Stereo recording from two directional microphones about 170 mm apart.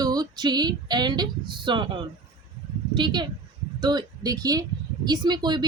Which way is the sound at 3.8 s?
25° right (ahead or behind).